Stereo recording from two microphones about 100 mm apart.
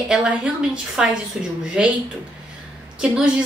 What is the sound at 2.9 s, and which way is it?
Speech, 10° right (ahead or behind).